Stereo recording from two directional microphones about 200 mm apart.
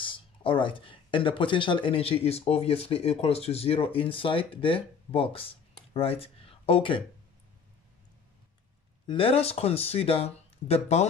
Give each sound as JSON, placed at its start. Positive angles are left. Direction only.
{"t": 0.0, "sound": "speech", "side_deg": 25}
{"t": 9.0, "sound": "speech", "side_deg": 25}